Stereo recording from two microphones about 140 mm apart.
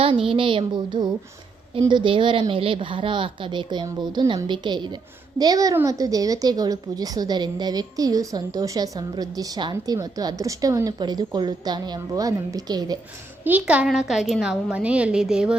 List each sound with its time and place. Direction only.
0.3 s a woman's voice: 35° right (ahead or behind)
13.4 s a child's voice: 10° right (ahead or behind)